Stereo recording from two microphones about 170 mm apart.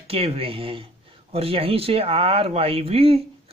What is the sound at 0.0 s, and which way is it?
Speech, 35° right (ahead or behind).